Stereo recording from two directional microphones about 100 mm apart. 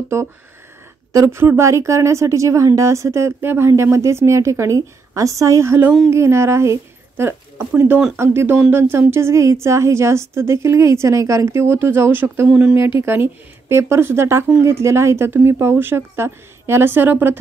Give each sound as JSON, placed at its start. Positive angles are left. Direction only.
{"t": 1.1, "sound": "speech", "side_deg": -30}